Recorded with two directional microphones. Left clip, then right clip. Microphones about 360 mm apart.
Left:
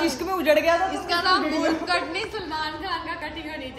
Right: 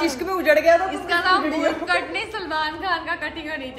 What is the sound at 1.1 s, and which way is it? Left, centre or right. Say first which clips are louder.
A woman's voice: right 3 dB; right.